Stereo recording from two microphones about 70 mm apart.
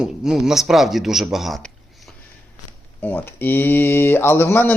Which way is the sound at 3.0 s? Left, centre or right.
Left.